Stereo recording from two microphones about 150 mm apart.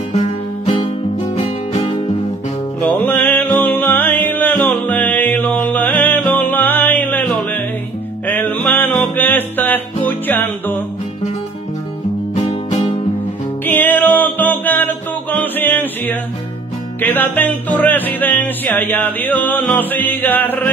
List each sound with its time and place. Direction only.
0.7 s music: 40° left (ahead or behind)
2.8 s music: 10° left (ahead or behind)
12.4 s music: 45° left (ahead or behind)
13.7 s music: 10° left (ahead or behind)